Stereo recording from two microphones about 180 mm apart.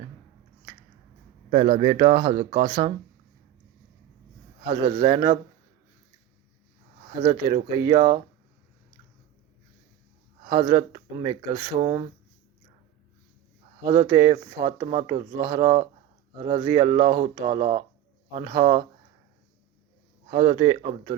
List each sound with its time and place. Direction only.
1.5 s speech: 35° right (ahead or behind)
4.6 s speech: 30° right (ahead or behind)
7.2 s speech: 25° right (ahead or behind)
10.4 s speech: 25° right (ahead or behind)
13.8 s speech: 25° right (ahead or behind)
20.3 s speech: 25° right (ahead or behind)